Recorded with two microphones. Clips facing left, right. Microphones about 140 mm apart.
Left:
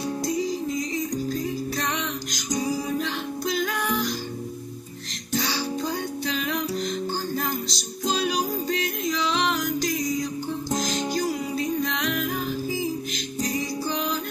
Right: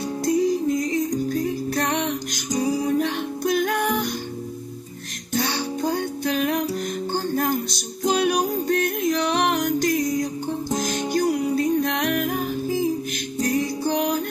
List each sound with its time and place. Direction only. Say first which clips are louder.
0.2 s music: right 9 dB; 55° right (ahead or behind)
5.3 s music: right 2 dB; 55° right (ahead or behind)